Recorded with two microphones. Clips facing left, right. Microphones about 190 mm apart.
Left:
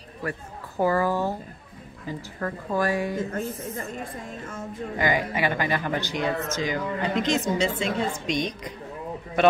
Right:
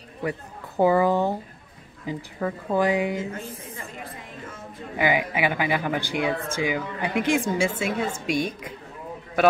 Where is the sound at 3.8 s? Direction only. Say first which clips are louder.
Left 4 dB; 50° left (ahead or behind).